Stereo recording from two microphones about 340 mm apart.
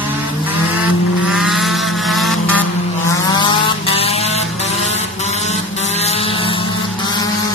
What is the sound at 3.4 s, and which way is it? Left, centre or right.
Vehicle, centre.